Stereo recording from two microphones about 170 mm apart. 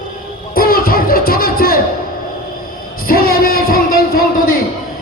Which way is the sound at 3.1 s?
60° left (ahead or behind).